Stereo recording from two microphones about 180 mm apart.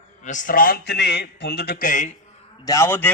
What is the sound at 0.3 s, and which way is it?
Speech, 45° left (ahead or behind).